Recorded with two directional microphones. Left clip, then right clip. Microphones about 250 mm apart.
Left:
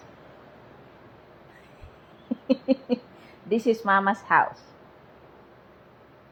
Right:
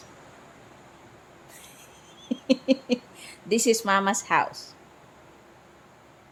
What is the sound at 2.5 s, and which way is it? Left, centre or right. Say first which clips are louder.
Rodents: right 1 dB; centre.